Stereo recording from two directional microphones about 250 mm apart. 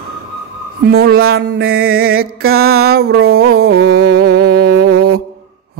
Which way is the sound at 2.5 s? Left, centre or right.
Right.